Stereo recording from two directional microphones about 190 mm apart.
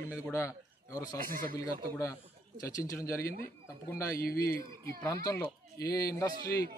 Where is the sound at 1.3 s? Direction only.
50° right (ahead or behind).